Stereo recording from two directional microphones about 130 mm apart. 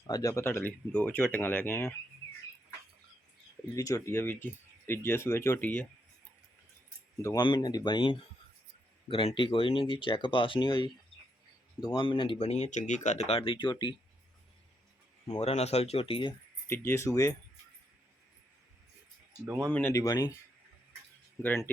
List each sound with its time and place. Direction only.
0.1 s speech: 25° left (ahead or behind)
3.8 s speech: 25° left (ahead or behind)
7.3 s speech: 35° left (ahead or behind)
12.4 s speech: 55° left (ahead or behind); by 13.9 s 35° left (ahead or behind)
15.3 s speech: 55° left (ahead or behind)
16.6 s speech: 20° left (ahead or behind)
19.5 s speech: 20° right (ahead or behind)
19.9 s speech: 25° left (ahead or behind)
21.4 s speech: 15° left (ahead or behind)